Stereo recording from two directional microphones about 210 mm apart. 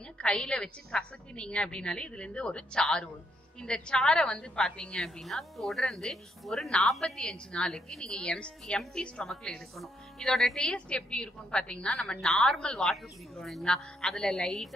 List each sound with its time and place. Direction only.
0.2 s a woman's voice: 5° left (ahead or behind)